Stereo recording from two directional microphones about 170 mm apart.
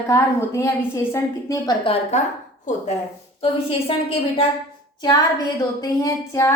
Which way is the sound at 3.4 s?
35° left (ahead or behind).